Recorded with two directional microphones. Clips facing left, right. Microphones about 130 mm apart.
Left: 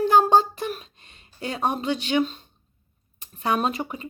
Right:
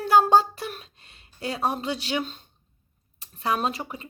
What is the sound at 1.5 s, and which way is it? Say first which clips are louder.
Speech: left 2 dB; centre (ahead or behind).